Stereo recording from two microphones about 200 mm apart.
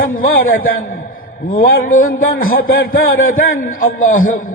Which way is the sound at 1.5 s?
45° left (ahead or behind).